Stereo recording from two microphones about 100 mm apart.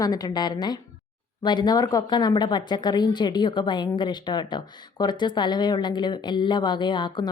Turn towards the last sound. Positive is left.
turn(degrees=50)  # may be behind; listen again after turning